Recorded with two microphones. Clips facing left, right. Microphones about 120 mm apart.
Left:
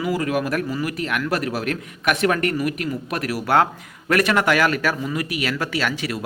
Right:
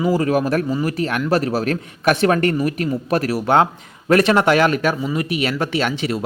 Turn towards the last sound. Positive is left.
turn(degrees=-25)  # may be behind; listen again after turning